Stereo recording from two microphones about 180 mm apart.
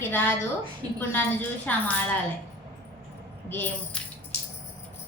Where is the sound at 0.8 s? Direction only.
25° right (ahead or behind).